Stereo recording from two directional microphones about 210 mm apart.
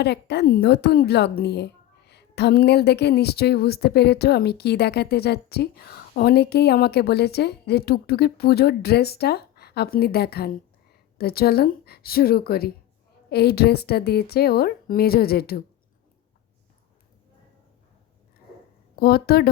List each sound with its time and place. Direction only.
0.0 s speech: 55° left (ahead or behind)
18.9 s speech: 45° left (ahead or behind)